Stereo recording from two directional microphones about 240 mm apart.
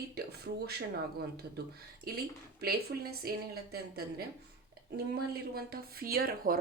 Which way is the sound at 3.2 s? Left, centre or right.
Right.